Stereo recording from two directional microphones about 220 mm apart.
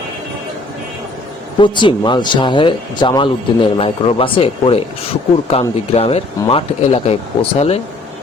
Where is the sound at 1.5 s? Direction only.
20° left (ahead or behind).